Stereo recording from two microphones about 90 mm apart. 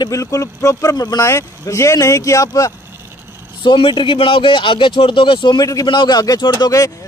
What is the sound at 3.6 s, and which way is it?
Speech, 65° left (ahead or behind).